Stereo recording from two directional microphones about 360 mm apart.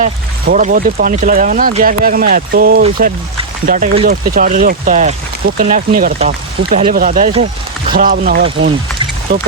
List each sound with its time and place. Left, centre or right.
0.0 s speech: right